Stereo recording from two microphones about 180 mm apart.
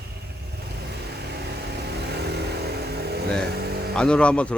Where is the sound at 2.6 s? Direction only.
60° right (ahead or behind).